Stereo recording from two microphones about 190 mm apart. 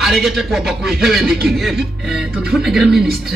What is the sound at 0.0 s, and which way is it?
A man's voice, centre (ahead or behind).